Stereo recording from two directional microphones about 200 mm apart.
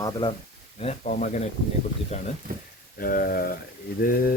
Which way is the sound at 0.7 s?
35° left (ahead or behind).